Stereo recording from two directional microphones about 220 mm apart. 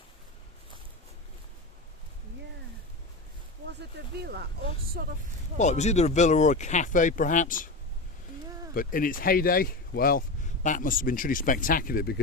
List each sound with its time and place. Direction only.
3.8 s speech: 45° right (ahead or behind)
5.5 s speech: 30° left (ahead or behind)
8.7 s speech: 40° left (ahead or behind)